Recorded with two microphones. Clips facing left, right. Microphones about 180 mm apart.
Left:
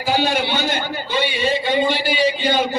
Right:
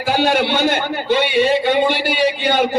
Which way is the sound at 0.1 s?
60° right (ahead or behind).